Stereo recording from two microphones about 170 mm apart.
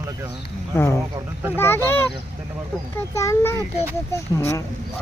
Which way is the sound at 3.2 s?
15° left (ahead or behind).